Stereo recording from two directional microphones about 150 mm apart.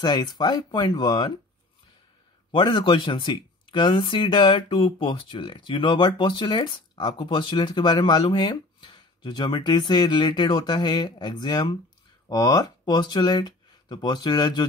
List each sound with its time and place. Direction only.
0.0 s speech: 30° left (ahead or behind)
2.5 s speech: 35° left (ahead or behind)